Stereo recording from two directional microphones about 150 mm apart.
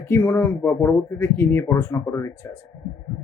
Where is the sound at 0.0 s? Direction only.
15° left (ahead or behind).